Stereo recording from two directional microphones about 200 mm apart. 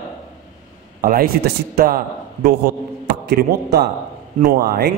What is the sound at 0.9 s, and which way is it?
A man's voice, 45° right (ahead or behind).